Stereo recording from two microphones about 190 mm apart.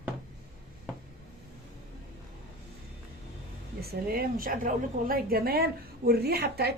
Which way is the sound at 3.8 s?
55° right (ahead or behind).